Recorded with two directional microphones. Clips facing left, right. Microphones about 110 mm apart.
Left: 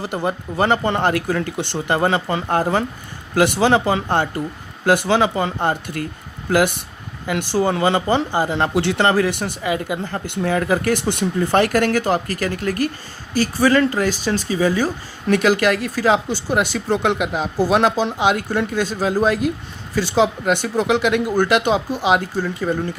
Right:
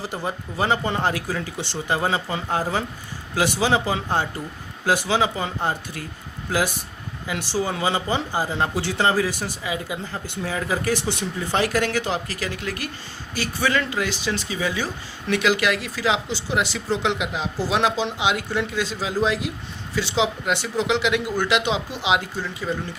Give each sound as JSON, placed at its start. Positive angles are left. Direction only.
{"t": 0.0, "sound": "speech", "side_deg": 60}
{"t": 7.3, "sound": "speech", "side_deg": 55}